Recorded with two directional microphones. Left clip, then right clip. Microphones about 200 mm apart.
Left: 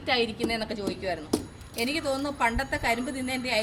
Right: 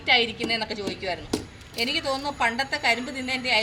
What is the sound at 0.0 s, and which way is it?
Speech, 25° left (ahead or behind).